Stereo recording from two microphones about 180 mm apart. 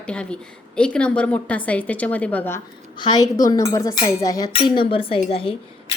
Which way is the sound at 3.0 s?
25° left (ahead or behind).